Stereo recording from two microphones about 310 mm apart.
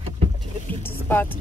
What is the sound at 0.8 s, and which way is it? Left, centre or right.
Speech, centre.